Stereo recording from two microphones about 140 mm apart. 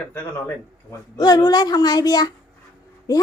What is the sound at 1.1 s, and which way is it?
Speech, 30° left (ahead or behind).